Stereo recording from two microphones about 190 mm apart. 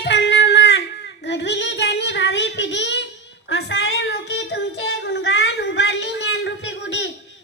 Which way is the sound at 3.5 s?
65° left (ahead or behind).